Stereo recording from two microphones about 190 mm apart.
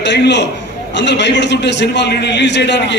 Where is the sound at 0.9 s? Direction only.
65° left (ahead or behind).